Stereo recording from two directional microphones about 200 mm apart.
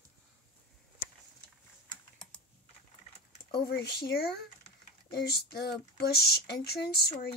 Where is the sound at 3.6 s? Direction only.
55° left (ahead or behind).